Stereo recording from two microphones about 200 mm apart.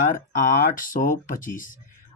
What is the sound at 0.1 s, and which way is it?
Speech, 40° left (ahead or behind).